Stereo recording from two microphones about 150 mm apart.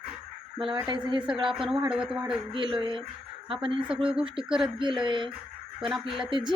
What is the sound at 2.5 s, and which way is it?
Speech, 35° right (ahead or behind).